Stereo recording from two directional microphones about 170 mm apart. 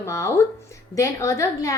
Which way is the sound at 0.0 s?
15° left (ahead or behind).